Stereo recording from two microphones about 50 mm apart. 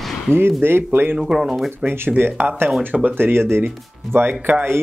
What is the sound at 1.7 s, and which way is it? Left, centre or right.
Speech, right.